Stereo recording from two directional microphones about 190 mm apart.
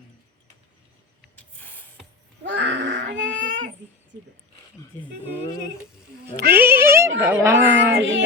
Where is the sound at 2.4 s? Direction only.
65° right (ahead or behind).